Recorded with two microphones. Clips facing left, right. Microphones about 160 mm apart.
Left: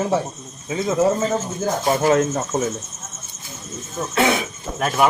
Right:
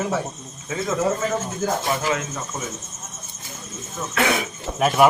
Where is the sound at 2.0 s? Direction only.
45° left (ahead or behind).